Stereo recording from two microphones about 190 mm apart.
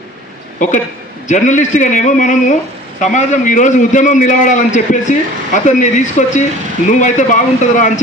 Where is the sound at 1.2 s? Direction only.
40° left (ahead or behind).